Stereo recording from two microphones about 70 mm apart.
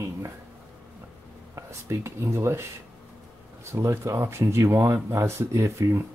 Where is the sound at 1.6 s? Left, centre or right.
Right.